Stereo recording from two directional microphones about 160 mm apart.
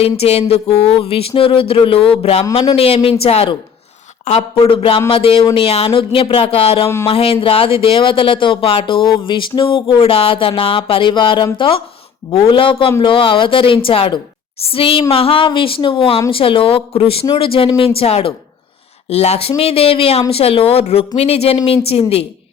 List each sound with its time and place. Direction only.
0.0 s speech: 40° left (ahead or behind)
6.8 s speech: 15° left (ahead or behind)
7.1 s speech: 35° left (ahead or behind)